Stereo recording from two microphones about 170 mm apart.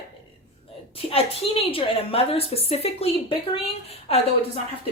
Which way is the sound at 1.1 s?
35° left (ahead or behind).